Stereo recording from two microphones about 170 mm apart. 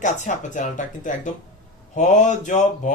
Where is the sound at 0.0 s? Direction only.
45° left (ahead or behind).